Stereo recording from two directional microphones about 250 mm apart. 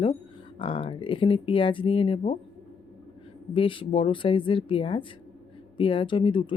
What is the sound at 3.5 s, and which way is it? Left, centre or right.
Speech, left.